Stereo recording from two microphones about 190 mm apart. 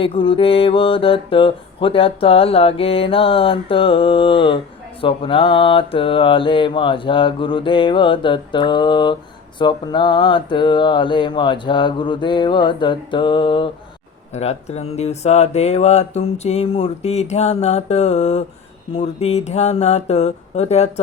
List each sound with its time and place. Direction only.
0.0 s mantra: 30° left (ahead or behind)
14.3 s speech: 35° left (ahead or behind)